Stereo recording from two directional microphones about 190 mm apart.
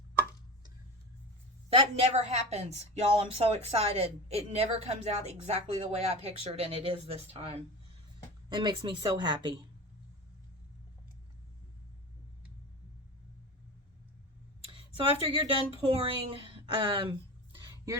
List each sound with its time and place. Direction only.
1.7 s a woman's voice: 35° right (ahead or behind)
14.7 s speech: 25° right (ahead or behind)